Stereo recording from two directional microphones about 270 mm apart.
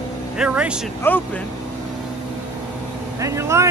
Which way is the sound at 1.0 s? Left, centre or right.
Centre.